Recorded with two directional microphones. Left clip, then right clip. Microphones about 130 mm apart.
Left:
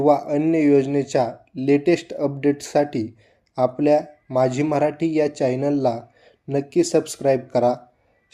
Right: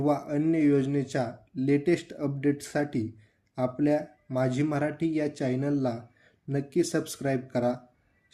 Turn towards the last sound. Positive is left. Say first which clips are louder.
# left 10 dB
turn(degrees=25)  # may be behind; listen again after turning